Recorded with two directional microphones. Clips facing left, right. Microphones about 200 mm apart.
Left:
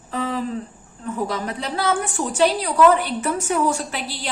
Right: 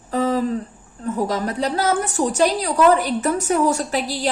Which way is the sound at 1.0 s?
40° right (ahead or behind).